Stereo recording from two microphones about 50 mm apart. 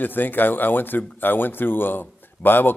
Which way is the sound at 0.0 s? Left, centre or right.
Left.